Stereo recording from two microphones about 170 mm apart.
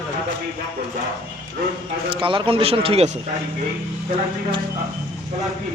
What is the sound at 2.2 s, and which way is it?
Speech, 30° right (ahead or behind).